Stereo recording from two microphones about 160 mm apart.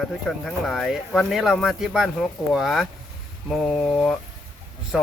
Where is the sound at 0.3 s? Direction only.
Centre (ahead or behind).